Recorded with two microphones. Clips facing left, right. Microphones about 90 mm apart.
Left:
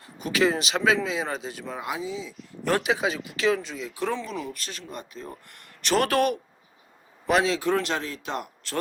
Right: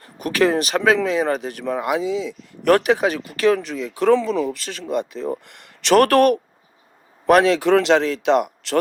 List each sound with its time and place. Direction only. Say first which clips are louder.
0.0 s speech: right 5 dB; 55° right (ahead or behind); by 6.1 s 85° right
6.1 s speech: right 8 dB; 55° right (ahead or behind); by 8.8 s 85° right